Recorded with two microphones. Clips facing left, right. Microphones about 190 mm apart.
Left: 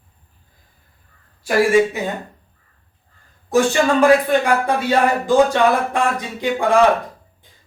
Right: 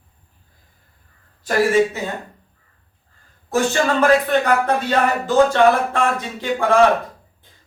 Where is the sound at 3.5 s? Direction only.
15° left (ahead or behind).